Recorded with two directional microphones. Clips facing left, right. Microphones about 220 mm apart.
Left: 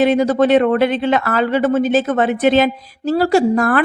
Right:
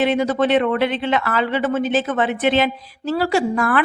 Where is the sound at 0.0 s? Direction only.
40° left (ahead or behind).